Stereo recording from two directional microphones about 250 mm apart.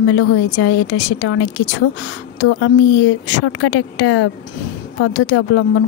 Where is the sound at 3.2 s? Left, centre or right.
Left.